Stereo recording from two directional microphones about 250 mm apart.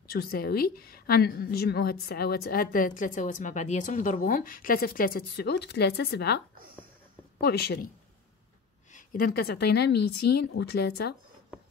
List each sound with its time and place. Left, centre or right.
0.1 s a woman's voice: left
8.9 s a woman's voice: left
10.2 s speech: left
10.6 s a woman's voice: left